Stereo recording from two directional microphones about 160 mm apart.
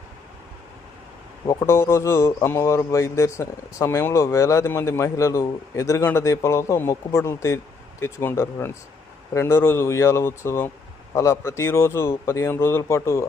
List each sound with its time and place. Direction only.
1.5 s a man's voice: 20° left (ahead or behind)